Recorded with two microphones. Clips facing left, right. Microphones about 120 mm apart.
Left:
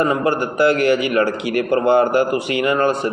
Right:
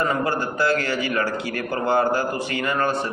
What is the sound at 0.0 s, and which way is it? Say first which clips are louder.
A man's voice: left 5 dB; 20° left (ahead or behind).